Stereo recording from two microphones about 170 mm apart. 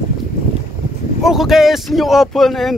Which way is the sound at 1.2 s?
Centre (ahead or behind).